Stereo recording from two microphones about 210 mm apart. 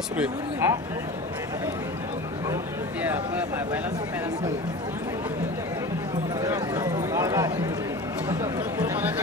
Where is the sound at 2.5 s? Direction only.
10° right (ahead or behind).